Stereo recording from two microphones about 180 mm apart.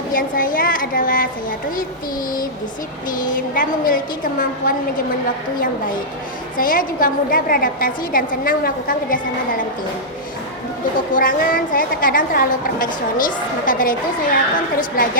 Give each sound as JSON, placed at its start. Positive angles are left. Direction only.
{"t": 0.1, "sound": "a woman's voice", "side_deg": 50}
{"t": 3.1, "sound": "a woman's voice", "side_deg": 50}
{"t": 6.6, "sound": "a woman's voice", "side_deg": 50}
{"t": 11.1, "sound": "a woman's voice", "side_deg": 50}